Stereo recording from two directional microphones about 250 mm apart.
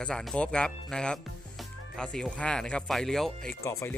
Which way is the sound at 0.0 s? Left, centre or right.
Centre.